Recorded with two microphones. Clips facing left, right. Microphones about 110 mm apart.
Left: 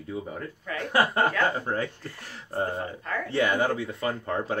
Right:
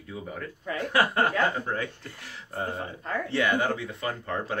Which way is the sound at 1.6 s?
35° left (ahead or behind).